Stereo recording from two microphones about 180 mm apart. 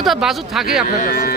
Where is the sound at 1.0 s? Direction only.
55° left (ahead or behind).